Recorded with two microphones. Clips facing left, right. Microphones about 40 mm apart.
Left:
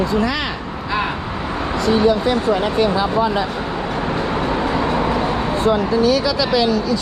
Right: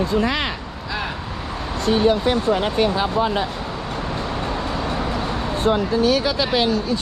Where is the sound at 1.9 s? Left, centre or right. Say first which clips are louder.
Left 1 dB; left.